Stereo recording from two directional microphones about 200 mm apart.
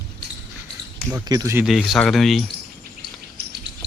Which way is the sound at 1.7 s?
Centre (ahead or behind).